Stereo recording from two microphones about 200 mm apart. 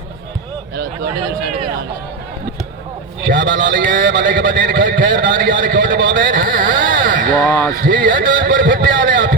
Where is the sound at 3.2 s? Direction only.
65° right (ahead or behind).